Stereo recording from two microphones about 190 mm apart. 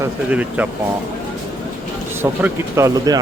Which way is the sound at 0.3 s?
5° right (ahead or behind).